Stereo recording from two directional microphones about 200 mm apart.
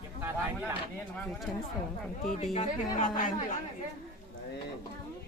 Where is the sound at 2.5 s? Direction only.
40° left (ahead or behind).